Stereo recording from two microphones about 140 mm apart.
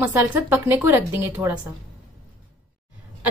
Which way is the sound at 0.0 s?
15° right (ahead or behind).